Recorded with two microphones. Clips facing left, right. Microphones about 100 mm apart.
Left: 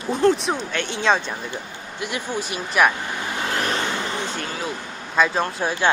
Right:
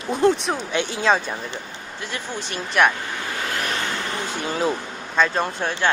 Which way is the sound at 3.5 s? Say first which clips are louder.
Left 3 dB; 30° left (ahead or behind).